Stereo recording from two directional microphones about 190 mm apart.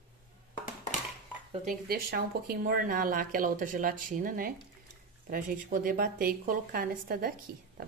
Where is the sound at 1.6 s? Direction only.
50° right (ahead or behind).